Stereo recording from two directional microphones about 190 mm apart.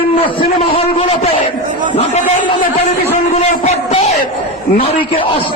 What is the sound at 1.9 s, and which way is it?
A man's voice, 40° left (ahead or behind).